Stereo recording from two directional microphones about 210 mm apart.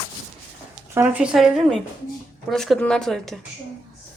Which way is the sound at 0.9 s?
10° right (ahead or behind).